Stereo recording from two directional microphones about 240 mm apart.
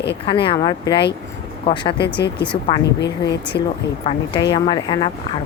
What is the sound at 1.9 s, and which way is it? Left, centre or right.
Speech, left.